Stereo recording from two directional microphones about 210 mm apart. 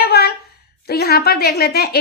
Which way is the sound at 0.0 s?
50° left (ahead or behind).